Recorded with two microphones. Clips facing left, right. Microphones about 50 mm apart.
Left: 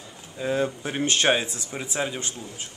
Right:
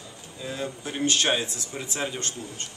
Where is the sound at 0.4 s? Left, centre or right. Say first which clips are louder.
Left 8 dB; left; by 2.7 s centre.